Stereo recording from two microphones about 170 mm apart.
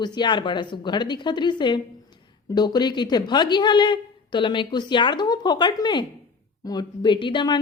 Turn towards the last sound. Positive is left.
turn(degrees=25)  # may be behind; listen again after turning